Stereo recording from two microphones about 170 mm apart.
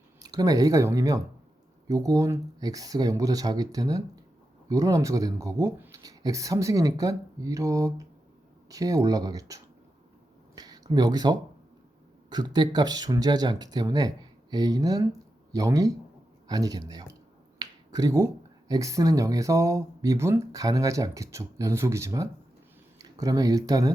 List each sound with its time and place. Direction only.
0.2 s speech: 20° right (ahead or behind)
10.5 s a sound: 20° right (ahead or behind)
12.3 s speech: 25° right (ahead or behind)
17.6 s finger snapping: 20° right (ahead or behind)
18.7 s speech: 20° right (ahead or behind)